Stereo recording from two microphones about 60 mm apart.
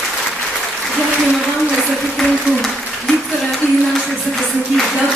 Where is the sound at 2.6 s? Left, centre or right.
Centre.